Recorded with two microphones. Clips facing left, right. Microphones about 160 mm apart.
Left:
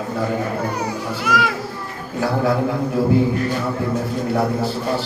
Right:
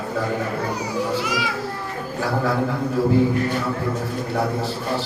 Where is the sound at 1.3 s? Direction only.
55° left (ahead or behind).